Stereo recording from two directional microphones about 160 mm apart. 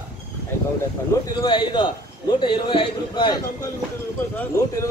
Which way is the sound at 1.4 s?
30° left (ahead or behind).